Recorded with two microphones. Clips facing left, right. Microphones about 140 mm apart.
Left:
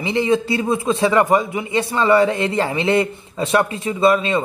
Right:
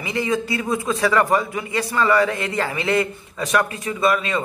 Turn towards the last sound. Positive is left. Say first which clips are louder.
# left 4 dB
turn(degrees=25)  # may be behind; listen again after turning